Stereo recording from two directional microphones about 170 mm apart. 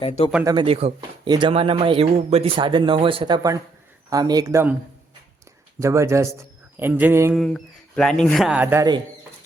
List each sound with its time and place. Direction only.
0.4 s speech: 30° right (ahead or behind)
5.8 s a man's voice: 15° right (ahead or behind)
7.3 s speech: centre (ahead or behind); by 8.9 s 15° right (ahead or behind)